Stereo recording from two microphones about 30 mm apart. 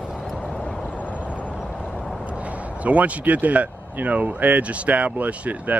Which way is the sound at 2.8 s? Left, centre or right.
Right.